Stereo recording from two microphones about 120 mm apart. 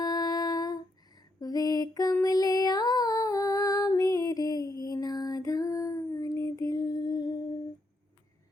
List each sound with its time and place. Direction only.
0.0 s humming: 30° left (ahead or behind)
1.4 s mantra: 30° left (ahead or behind)
2.2 s female singing: 30° left (ahead or behind)
4.8 s a sound: 30° left (ahead or behind)